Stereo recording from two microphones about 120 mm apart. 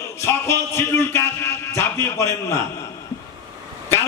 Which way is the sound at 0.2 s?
20° left (ahead or behind).